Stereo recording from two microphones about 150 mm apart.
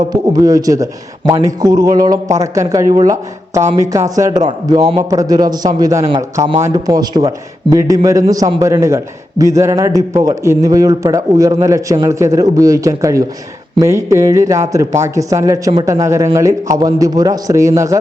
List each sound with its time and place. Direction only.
0.0 s a man's voice: 25° right (ahead or behind)